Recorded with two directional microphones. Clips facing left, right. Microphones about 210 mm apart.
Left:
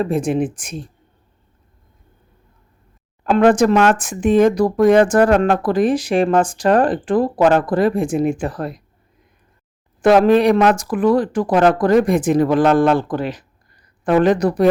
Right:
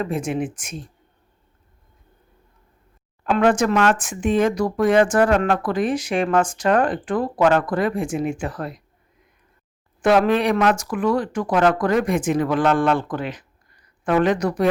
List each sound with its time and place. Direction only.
0.0 s speech: 35° left (ahead or behind)
3.2 s speech: 35° left (ahead or behind)
10.0 s speech: 35° left (ahead or behind)